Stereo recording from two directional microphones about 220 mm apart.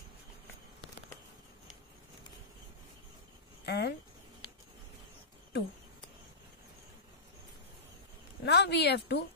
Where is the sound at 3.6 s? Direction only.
50° left (ahead or behind).